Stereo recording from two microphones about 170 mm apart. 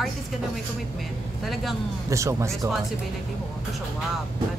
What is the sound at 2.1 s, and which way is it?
Speech, 15° right (ahead or behind).